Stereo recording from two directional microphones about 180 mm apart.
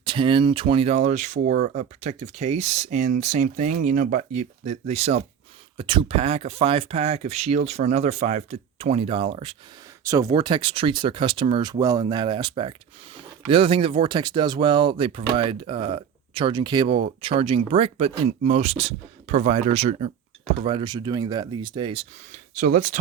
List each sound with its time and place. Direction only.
0.0 s speech: 25° right (ahead or behind)
10.0 s speech: 15° right (ahead or behind)
22.5 s speech: 45° right (ahead or behind)